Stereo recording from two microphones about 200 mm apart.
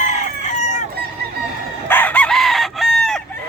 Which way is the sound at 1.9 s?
10° left (ahead or behind).